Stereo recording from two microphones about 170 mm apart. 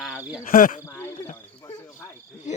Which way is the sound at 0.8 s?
15° left (ahead or behind).